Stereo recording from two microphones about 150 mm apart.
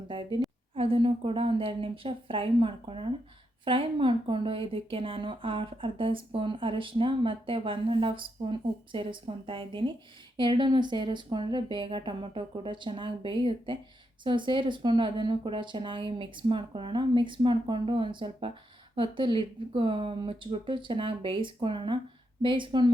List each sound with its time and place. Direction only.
0.1 s a woman's voice: 30° right (ahead or behind)